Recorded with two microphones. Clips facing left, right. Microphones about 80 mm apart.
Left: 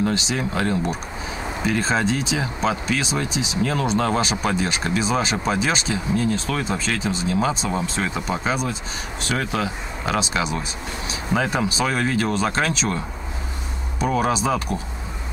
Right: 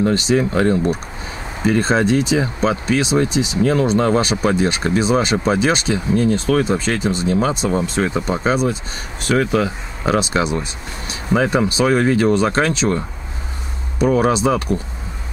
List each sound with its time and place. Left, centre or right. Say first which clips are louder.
0.0 s speech: right 7 dB; right
14.1 s speech: right 4 dB; right